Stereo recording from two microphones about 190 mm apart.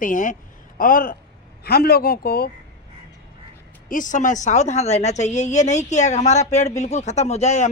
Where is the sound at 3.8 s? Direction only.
45° left (ahead or behind).